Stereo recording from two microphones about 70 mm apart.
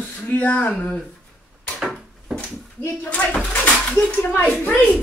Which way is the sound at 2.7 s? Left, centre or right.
Left.